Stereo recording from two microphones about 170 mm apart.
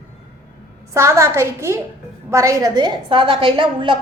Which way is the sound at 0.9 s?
15° right (ahead or behind).